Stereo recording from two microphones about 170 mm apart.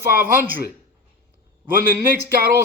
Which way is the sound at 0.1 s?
60° right (ahead or behind).